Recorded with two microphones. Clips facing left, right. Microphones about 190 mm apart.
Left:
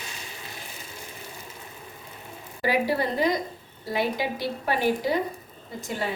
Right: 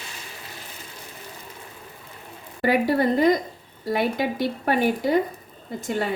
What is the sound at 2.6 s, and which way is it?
A woman's voice, 55° right (ahead or behind).